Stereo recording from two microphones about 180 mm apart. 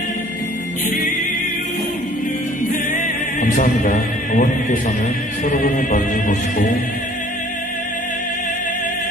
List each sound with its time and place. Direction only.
3.0 s music: 45° left (ahead or behind)